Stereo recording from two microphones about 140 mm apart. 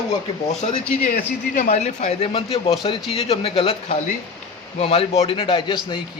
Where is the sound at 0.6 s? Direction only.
55° left (ahead or behind).